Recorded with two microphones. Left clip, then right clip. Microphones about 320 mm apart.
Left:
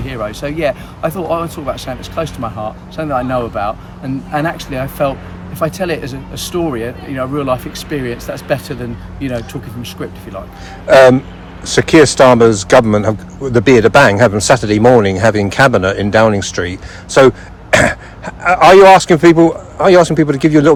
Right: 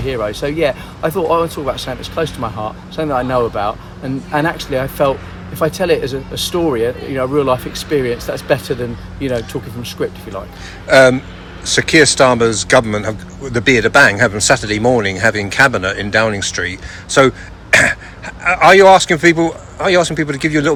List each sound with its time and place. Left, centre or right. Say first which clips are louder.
0.1 s speech: right 2 dB; centre
10.8 s speech: left 3 dB; centre